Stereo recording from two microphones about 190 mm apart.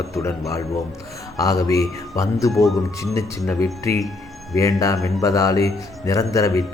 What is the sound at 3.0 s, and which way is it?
A man's voice, 15° left (ahead or behind).